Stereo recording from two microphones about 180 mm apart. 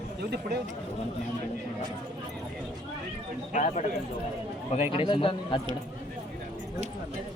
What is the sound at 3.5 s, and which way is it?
Speech, 40° left (ahead or behind).